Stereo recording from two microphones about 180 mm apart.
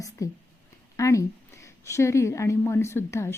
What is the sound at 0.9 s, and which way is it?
A woman's voice, 15° left (ahead or behind).